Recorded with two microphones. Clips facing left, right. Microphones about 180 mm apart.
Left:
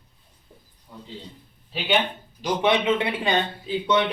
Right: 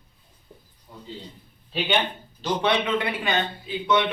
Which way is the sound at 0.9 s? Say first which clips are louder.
Left 1 dB; centre (ahead or behind).